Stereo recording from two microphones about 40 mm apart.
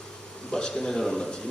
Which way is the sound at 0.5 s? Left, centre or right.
Centre.